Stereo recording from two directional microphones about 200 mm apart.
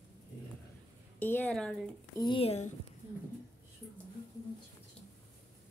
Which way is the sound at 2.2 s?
25° left (ahead or behind).